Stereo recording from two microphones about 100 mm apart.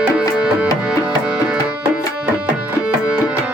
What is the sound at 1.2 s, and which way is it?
Tabla, 10° right (ahead or behind).